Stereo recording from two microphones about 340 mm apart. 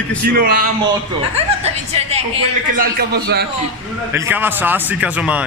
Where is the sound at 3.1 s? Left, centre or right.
Right.